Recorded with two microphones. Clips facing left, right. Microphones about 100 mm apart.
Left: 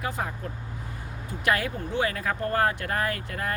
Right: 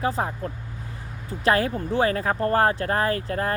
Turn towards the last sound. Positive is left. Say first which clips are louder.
# right 6 dB
turn(degrees=-35)  # may be behind; listen again after turning